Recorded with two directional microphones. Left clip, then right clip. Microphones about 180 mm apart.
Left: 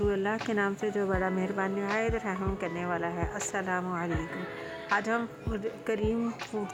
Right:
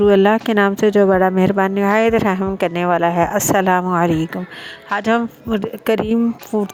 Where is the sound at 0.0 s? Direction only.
55° right (ahead or behind).